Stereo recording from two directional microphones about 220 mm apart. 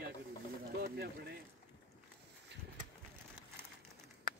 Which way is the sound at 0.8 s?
45° right (ahead or behind).